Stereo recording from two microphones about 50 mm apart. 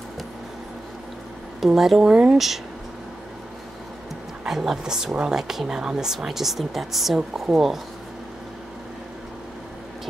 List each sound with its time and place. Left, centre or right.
1.8 s speech: centre
2.0 s speech: centre
2.3 s speech: centre
4.5 s speech: centre